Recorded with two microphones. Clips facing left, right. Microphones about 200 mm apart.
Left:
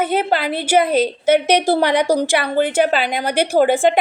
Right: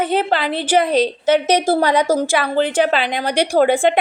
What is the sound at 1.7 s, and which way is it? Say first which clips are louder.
A woman's voice: even; 65° left (ahead or behind).